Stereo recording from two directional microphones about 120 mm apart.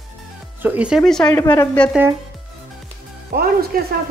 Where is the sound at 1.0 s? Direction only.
5° left (ahead or behind).